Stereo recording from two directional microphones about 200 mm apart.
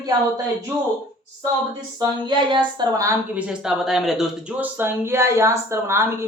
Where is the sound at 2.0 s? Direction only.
20° right (ahead or behind).